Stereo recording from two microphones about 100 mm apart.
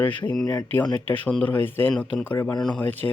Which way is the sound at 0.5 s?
20° left (ahead or behind).